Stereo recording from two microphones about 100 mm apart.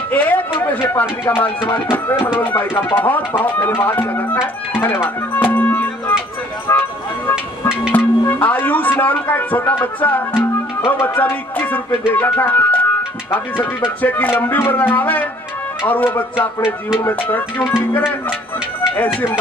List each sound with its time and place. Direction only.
0.1 s a sound: 15° left (ahead or behind)
0.7 s speech: 15° left (ahead or behind)
6.7 s music: 30° left (ahead or behind)
7.9 s speech: 15° left (ahead or behind)